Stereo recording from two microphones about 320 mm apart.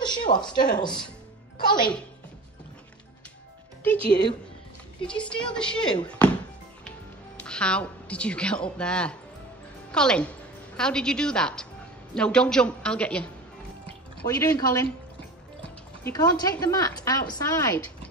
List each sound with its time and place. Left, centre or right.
0.3 s speech: left
0.7 s a woman's voice: centre
3.8 s a woman's voice: centre
7.4 s a woman's voice: centre
16.0 s a woman's voice: centre